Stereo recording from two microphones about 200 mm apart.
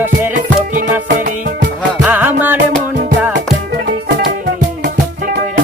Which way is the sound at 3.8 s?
55° right (ahead or behind).